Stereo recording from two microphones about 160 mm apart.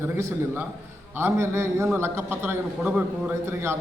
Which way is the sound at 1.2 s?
15° right (ahead or behind).